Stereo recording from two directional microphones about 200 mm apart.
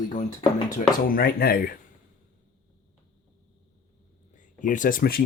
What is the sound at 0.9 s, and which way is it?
Speech, 45° left (ahead or behind).